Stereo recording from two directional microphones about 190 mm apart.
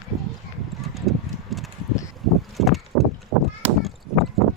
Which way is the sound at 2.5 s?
Centre (ahead or behind).